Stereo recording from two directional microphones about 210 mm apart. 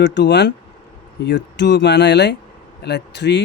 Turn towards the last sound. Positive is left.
turn(degrees=55)  # may be behind; listen again after turning